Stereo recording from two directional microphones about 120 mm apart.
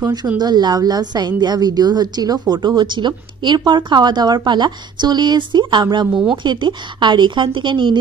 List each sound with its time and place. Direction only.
0.0 s a woman's voice: 35° right (ahead or behind)